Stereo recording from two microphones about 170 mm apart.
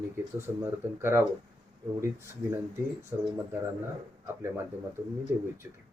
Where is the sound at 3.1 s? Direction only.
10° right (ahead or behind).